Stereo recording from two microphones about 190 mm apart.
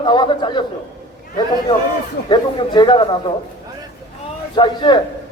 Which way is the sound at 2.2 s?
25° left (ahead or behind).